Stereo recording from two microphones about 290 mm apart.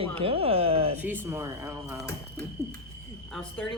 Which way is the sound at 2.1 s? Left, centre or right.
Centre.